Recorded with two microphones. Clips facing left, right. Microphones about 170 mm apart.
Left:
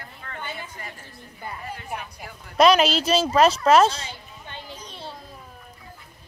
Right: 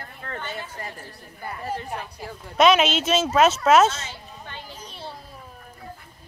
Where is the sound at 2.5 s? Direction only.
Centre (ahead or behind).